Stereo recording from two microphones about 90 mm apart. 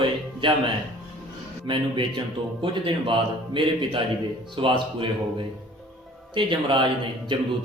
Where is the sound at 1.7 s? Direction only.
60° right (ahead or behind).